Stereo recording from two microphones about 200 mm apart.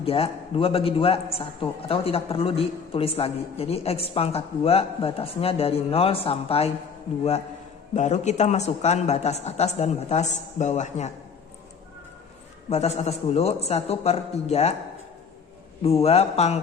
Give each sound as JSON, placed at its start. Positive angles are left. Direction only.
{"t": 0.0, "sound": "a man's voice", "side_deg": 30}
{"t": 7.9, "sound": "speech", "side_deg": 35}
{"t": 12.7, "sound": "speech", "side_deg": 30}
{"t": 16.0, "sound": "speech", "side_deg": 30}